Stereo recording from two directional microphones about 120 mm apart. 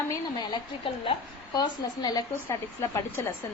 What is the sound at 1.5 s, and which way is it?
Speech, 35° left (ahead or behind).